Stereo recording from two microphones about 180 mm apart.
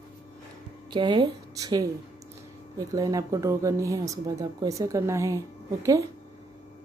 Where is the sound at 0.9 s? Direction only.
25° right (ahead or behind).